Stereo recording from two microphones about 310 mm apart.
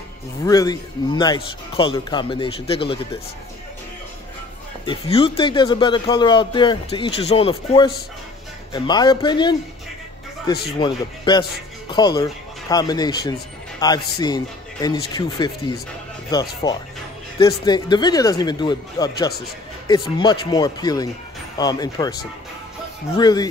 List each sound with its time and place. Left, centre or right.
0.5 s a man's voice: centre
4.8 s a man's voice: centre
10.8 s a man's voice: centre
16.6 s a man's voice: centre
23.1 s a man's voice: centre